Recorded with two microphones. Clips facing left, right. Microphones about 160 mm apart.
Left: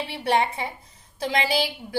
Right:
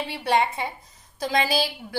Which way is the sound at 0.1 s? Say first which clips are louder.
Even; 25° left (ahead or behind).